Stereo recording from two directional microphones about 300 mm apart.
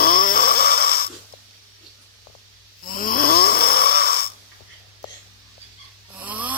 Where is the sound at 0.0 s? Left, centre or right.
Left.